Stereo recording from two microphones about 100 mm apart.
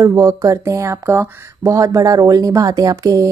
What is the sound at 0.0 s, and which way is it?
Speech, 35° right (ahead or behind).